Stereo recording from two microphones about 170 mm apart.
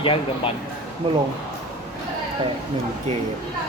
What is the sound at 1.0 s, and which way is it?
Speech, 30° right (ahead or behind).